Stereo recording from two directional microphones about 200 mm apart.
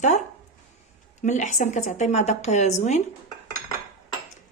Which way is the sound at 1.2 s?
35° left (ahead or behind).